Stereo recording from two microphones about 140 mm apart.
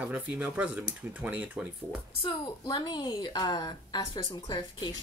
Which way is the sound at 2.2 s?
30° left (ahead or behind).